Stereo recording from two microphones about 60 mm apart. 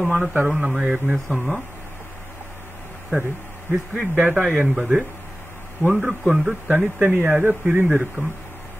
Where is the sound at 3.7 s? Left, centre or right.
Centre.